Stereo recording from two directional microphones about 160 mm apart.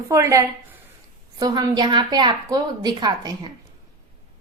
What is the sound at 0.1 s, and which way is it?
Speech, 20° right (ahead or behind).